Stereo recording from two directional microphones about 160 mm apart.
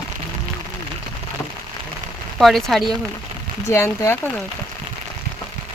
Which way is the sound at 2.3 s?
Centre (ahead or behind).